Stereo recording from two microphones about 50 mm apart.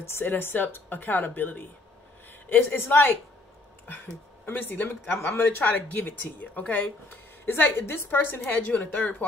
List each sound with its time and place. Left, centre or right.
0.2 s speech: left
8.6 s speech: left